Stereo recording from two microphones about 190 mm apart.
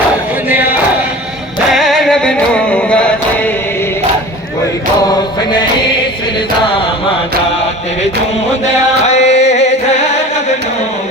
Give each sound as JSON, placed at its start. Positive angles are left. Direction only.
{"t": 1.7, "sound": "music", "side_deg": 0}
{"t": 5.0, "sound": "music", "side_deg": 25}
{"t": 9.0, "sound": "music", "side_deg": 35}